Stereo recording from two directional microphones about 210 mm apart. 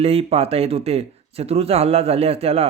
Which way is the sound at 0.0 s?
30° right (ahead or behind).